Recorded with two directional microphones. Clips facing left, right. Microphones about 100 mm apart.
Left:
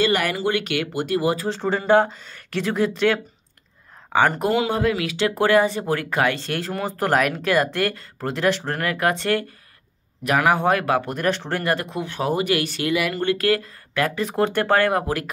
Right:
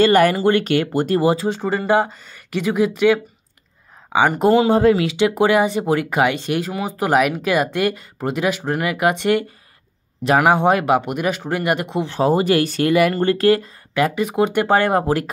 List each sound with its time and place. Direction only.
0.0 s speech: 40° right (ahead or behind)
1.2 s speech: 25° right (ahead or behind)
1.5 s speech: 5° right (ahead or behind)
4.4 s speech: 30° right (ahead or behind)
5.1 s speech: 15° right (ahead or behind)